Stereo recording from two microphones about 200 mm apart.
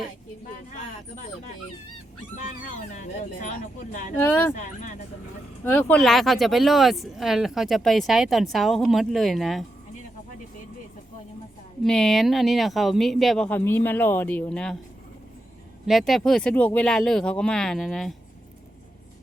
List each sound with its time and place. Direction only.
2.6 s speech: 40° left (ahead or behind)
4.3 s speech: 10° left (ahead or behind)
4.5 s speech: 40° left (ahead or behind)
5.6 s speech: 10° left (ahead or behind)
11.8 s speech: centre (ahead or behind)
15.9 s speech: centre (ahead or behind)